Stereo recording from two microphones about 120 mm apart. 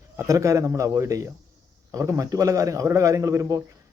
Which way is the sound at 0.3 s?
25° right (ahead or behind).